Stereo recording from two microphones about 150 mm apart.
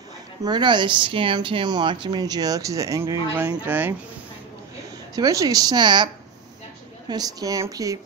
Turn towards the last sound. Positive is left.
turn(degrees=-20)  # may be behind; listen again after turning